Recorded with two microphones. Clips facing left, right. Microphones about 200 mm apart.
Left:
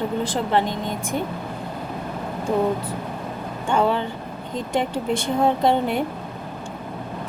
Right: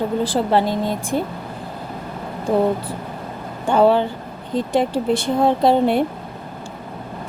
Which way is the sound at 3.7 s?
35° right (ahead or behind).